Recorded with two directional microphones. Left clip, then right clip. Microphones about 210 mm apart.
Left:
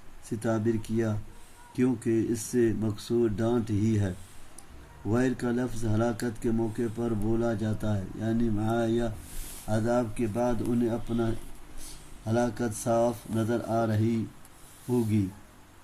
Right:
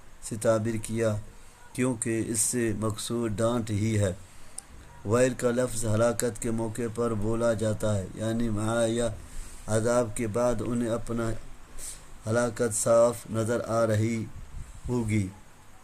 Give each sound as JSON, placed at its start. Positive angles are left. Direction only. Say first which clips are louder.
{"t": 0.3, "sound": "speech", "louder": "right 3 dB", "side_deg": -50}
{"t": 5.1, "sound": "speech", "louder": "right 5 dB", "side_deg": -45}
{"t": 12.3, "sound": "speech", "louder": "right 2 dB", "side_deg": -45}